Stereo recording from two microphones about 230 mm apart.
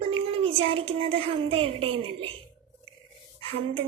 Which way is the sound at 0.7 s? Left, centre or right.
Right.